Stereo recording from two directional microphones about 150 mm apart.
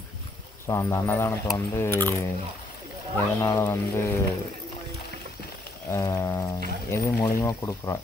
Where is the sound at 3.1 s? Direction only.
20° left (ahead or behind).